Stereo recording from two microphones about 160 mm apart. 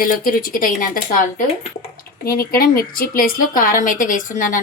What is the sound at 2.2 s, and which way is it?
A woman's voice, 70° left (ahead or behind).